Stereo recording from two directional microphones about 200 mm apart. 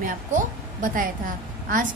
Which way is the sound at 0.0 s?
45° right (ahead or behind).